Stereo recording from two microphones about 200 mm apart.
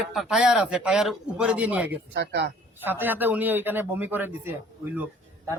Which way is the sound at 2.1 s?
60° right (ahead or behind).